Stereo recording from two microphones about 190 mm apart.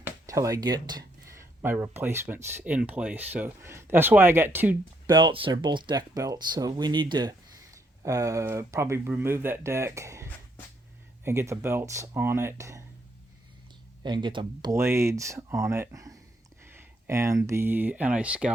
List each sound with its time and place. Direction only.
0.0 s speech: 15° right (ahead or behind)
5.0 s speech: 25° right (ahead or behind)
14.0 s speech: 25° right (ahead or behind); by 18.5 s 5° right (ahead or behind)